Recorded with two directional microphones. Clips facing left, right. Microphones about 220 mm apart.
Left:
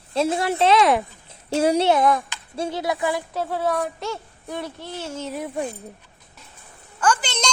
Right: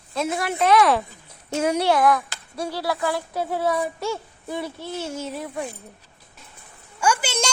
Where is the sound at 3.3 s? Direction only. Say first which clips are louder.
Even; 10° right (ahead or behind).